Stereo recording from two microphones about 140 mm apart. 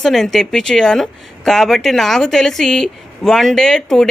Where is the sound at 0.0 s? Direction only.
Centre (ahead or behind).